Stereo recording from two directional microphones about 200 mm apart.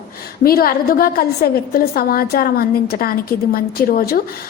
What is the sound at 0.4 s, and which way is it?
A woman's voice, 50° left (ahead or behind).